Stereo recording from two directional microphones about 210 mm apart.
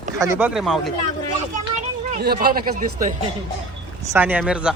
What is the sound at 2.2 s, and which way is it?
Speech, 50° right (ahead or behind).